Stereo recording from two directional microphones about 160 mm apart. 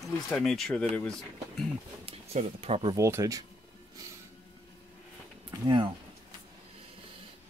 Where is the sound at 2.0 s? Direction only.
35° right (ahead or behind).